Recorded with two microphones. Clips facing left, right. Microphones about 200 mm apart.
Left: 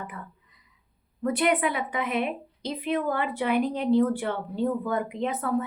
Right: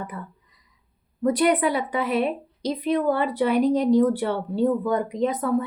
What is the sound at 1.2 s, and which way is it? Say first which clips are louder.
A woman's voice: right 4 dB; 35° right (ahead or behind).